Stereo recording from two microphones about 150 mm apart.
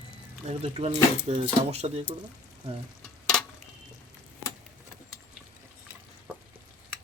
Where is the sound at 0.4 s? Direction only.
45° right (ahead or behind).